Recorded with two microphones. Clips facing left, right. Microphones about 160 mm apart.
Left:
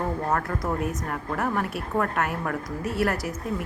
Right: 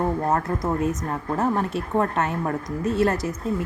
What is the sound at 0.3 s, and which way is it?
A woman's voice, 25° right (ahead or behind).